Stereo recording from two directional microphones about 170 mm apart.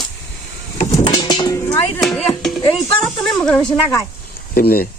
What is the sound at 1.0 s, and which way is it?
Music, 25° left (ahead or behind).